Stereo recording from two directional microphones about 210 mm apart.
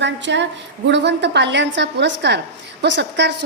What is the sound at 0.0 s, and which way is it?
A woman's voice, 60° right (ahead or behind).